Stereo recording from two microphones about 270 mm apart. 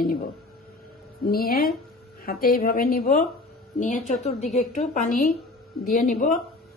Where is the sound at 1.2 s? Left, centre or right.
Left.